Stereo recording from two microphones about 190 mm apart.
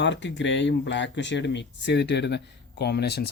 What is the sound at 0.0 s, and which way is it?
Speech, 70° left (ahead or behind).